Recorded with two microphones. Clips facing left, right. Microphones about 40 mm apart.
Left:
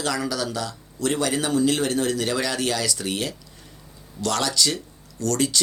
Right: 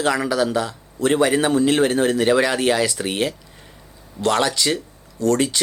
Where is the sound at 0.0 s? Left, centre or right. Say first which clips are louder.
Right 6 dB; right.